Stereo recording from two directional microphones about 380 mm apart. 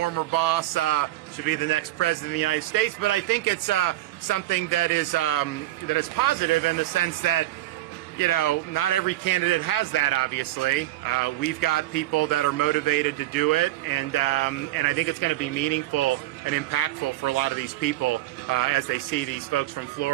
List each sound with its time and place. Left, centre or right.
0.0 s a man's voice: left